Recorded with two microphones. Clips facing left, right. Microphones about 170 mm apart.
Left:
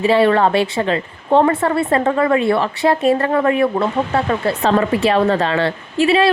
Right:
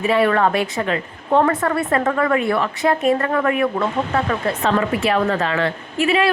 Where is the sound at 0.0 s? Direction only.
30° left (ahead or behind).